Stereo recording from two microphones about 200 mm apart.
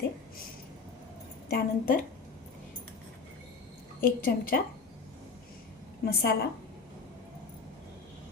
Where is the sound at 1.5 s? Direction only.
45° left (ahead or behind).